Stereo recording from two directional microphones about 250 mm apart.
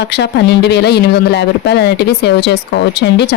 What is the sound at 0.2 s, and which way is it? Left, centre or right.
A woman's voice, left.